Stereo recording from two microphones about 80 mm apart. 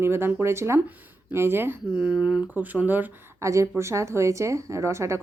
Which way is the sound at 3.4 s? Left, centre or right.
Right.